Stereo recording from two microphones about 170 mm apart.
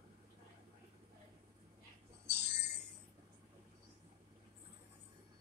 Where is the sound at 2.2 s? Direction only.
75° left (ahead or behind).